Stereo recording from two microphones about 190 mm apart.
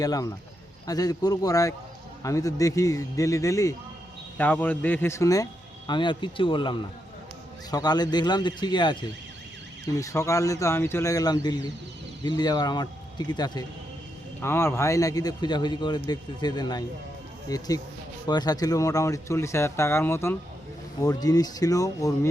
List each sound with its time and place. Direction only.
0.0 s a man's voice: 20° left (ahead or behind)